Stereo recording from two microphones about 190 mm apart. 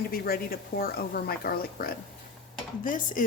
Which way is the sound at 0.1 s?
50° left (ahead or behind).